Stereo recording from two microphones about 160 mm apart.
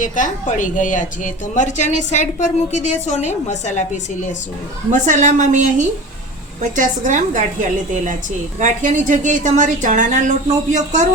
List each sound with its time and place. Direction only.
0.0 s a woman's voice: 50° left (ahead or behind)
4.9 s a woman's voice: 50° right (ahead or behind)